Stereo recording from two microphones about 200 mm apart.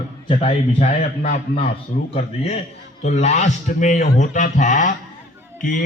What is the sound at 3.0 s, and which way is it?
A man's voice, 35° left (ahead or behind).